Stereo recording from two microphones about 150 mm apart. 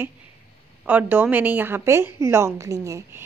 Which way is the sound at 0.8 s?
10° right (ahead or behind).